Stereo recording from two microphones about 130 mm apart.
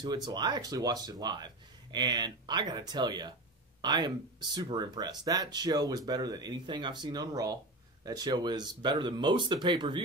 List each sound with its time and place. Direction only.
0.0 s speech: 35° right (ahead or behind)